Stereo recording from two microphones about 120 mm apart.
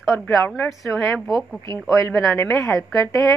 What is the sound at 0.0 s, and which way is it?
A woman's voice, centre (ahead or behind).